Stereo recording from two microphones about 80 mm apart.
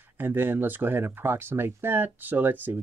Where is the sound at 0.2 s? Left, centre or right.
Right.